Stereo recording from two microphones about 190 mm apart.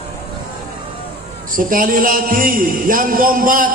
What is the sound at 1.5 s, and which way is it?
A man's voice, 45° right (ahead or behind).